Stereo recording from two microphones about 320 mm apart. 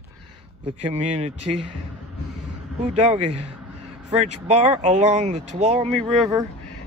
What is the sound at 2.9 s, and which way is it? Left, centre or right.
Speech, right.